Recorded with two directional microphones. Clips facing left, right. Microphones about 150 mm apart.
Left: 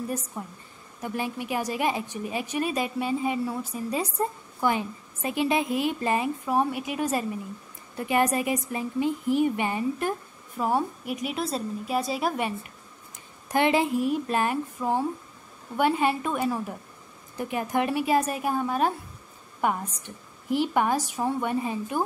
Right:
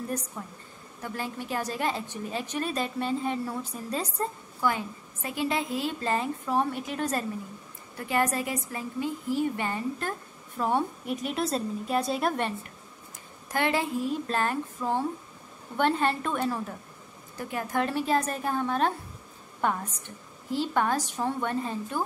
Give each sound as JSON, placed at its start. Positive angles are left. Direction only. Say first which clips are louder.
{"t": 0.3, "sound": "a woman's voice", "louder": "left 3 dB", "side_deg": 20}
{"t": 13.5, "sound": "a woman's voice", "louder": "left 5 dB", "side_deg": 20}